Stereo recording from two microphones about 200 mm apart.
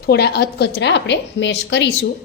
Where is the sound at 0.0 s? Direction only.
55° left (ahead or behind).